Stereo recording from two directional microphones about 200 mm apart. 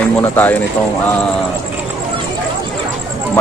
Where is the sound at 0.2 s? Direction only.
10° left (ahead or behind).